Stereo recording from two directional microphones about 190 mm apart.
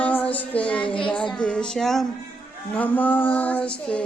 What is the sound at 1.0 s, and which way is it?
Speech, 5° left (ahead or behind).